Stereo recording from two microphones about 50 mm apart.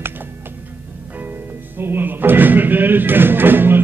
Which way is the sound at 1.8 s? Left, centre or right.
Right.